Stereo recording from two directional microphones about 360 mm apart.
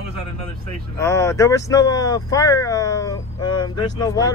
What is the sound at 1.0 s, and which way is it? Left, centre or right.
Speech, centre.